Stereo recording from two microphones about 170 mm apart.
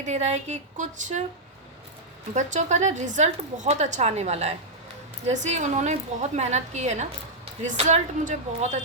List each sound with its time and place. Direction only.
0.0 s a woman's voice: 45° right (ahead or behind)
2.3 s a woman's voice: 45° right (ahead or behind)